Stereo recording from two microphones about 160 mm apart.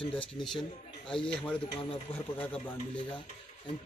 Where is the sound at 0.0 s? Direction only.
35° left (ahead or behind).